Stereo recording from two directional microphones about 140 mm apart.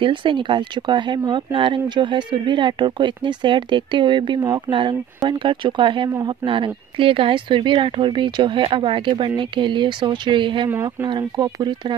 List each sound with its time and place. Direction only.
0.0 s speech: 35° right (ahead or behind)
10.7 s speech: 20° right (ahead or behind)
11.1 s speech: 30° right (ahead or behind)